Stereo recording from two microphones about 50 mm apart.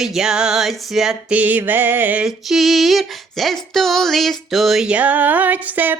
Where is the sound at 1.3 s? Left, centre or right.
Right.